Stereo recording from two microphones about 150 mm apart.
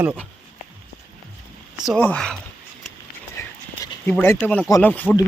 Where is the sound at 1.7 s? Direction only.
5° right (ahead or behind).